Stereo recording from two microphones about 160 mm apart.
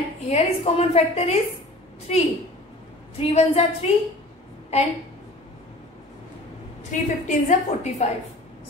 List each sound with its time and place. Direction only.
0.3 s a woman's voice: 40° left (ahead or behind)
6.8 s a woman's voice: 50° left (ahead or behind)